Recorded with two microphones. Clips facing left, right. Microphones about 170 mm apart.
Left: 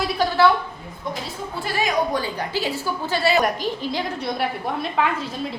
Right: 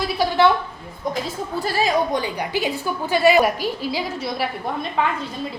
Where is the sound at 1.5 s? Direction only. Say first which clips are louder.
Right 3 dB; 35° right (ahead or behind).